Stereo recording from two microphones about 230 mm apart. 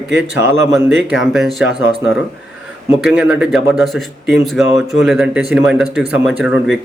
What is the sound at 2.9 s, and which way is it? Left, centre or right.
Speech, centre.